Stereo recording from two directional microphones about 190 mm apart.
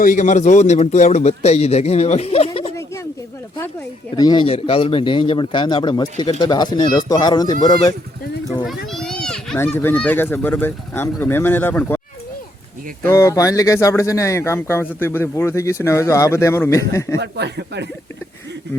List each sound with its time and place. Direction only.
0.0 s a man's voice: 40° left (ahead or behind)
2.7 s a sound: 15° left (ahead or behind)
4.2 s a man's voice: 25° left (ahead or behind)
8.6 s speech: centre (ahead or behind)
13.0 s speech: 15° left (ahead or behind)
17.2 s speech: 60° right (ahead or behind)